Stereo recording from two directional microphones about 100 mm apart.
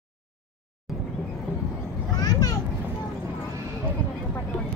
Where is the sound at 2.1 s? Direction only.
40° left (ahead or behind).